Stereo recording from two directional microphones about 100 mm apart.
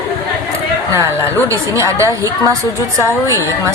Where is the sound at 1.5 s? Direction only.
30° right (ahead or behind).